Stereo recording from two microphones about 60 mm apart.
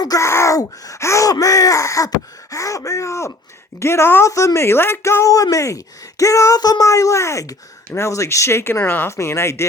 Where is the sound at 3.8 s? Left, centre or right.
Left.